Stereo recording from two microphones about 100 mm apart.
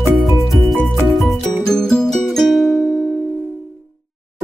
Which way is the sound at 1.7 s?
5° left (ahead or behind).